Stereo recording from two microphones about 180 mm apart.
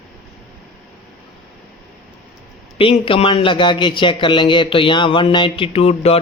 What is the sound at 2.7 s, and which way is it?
A man's voice, 30° left (ahead or behind).